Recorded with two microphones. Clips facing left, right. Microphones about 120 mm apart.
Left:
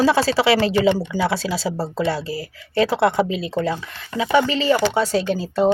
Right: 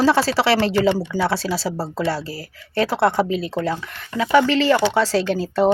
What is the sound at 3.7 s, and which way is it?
A woman's voice, 20° left (ahead or behind).